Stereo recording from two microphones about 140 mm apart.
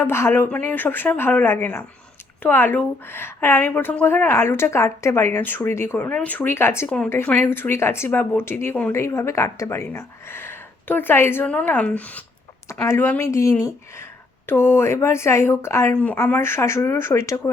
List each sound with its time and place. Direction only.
0.0 s a woman's voice: 20° left (ahead or behind)